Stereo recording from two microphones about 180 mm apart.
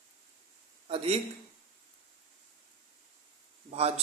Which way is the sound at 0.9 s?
35° right (ahead or behind).